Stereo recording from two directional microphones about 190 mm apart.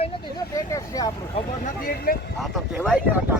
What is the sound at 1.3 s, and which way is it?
Speech, 40° left (ahead or behind).